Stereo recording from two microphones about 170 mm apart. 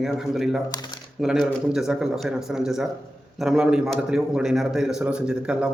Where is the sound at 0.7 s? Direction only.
25° left (ahead or behind).